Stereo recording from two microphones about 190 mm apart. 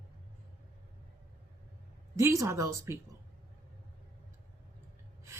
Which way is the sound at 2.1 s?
15° right (ahead or behind).